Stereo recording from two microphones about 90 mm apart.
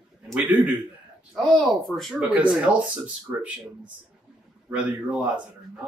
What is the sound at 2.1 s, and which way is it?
Speech, 15° right (ahead or behind).